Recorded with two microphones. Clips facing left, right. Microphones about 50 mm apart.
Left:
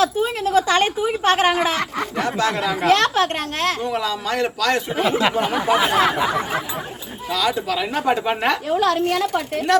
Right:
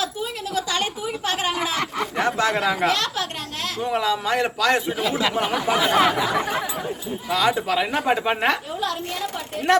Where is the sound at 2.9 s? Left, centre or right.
Left.